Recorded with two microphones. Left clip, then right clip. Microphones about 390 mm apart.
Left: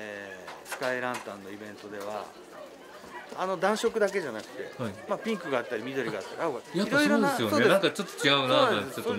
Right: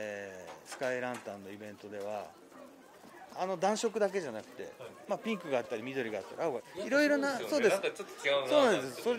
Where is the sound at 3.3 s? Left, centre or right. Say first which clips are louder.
Left 4 dB; right.